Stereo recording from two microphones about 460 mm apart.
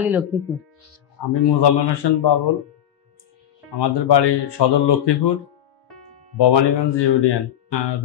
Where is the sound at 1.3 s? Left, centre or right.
Left.